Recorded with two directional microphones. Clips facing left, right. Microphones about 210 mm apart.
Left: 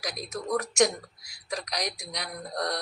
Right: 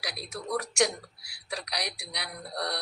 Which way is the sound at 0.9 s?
45° left (ahead or behind).